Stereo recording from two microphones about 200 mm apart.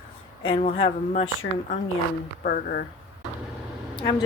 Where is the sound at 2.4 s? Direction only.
50° left (ahead or behind).